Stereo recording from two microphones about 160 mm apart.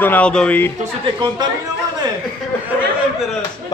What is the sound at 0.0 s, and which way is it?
Speech, 10° left (ahead or behind).